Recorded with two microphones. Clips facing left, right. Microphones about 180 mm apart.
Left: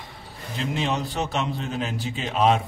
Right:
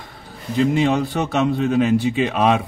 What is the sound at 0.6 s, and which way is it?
A man's voice, 55° right (ahead or behind).